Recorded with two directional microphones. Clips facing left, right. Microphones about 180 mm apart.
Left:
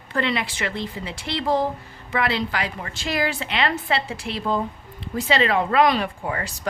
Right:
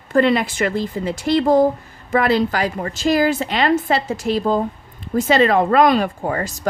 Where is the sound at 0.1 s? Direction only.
45° right (ahead or behind).